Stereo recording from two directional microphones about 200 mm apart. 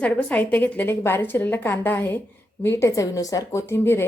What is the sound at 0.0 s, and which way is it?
A woman's voice, 5° left (ahead or behind).